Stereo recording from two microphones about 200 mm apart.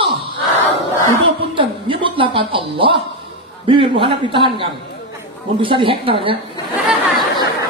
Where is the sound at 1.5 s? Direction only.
25° right (ahead or behind).